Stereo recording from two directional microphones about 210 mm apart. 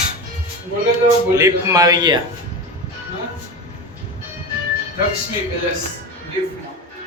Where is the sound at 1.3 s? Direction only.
15° right (ahead or behind).